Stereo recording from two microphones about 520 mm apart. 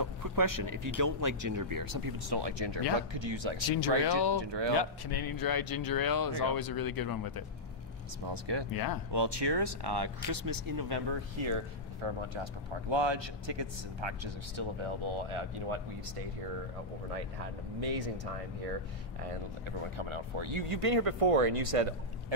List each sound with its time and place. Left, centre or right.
0.0 s speech: right
4.0 s speech: left
4.4 s speech: right
4.7 s speech: left
8.3 s speech: right
8.7 s speech: left
9.1 s speech: right
12.9 s speech: right
17.7 s speech: right
19.8 s speech: right